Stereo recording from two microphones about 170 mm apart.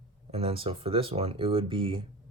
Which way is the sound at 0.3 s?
35° right (ahead or behind).